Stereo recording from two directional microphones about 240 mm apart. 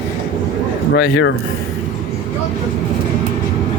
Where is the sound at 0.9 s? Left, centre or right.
Left.